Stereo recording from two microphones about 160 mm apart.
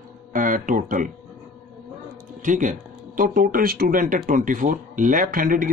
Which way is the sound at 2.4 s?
50° right (ahead or behind).